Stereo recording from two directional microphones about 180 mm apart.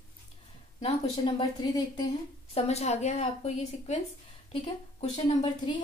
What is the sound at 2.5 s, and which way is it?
A woman's voice, 35° left (ahead or behind).